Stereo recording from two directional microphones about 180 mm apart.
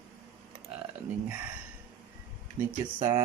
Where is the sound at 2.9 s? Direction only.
25° right (ahead or behind).